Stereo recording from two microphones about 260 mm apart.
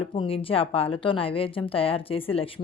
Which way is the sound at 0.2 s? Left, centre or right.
Left.